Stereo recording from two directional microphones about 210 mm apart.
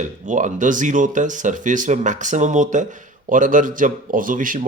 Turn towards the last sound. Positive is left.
turn(degrees=-40)  # may be behind; listen again after turning